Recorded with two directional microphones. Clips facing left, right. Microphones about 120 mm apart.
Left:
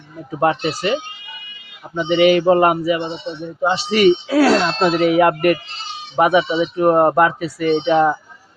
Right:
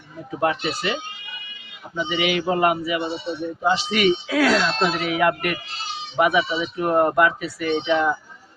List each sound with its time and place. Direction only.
0.3 s speech: 35° left (ahead or behind)
2.0 s speech: 45° left (ahead or behind)